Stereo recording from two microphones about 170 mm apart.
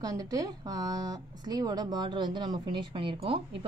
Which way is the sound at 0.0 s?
20° right (ahead or behind).